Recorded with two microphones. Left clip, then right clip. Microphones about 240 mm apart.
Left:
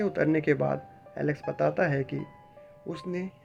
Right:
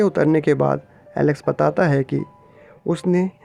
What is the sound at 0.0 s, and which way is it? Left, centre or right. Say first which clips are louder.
Speech: right 9 dB; right.